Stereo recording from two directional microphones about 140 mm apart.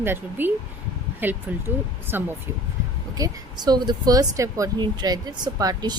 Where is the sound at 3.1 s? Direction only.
30° right (ahead or behind).